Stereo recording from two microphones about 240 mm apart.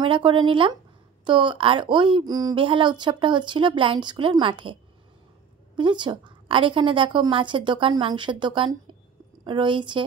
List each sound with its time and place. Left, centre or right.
0.0 s speech: right
5.8 s speech: centre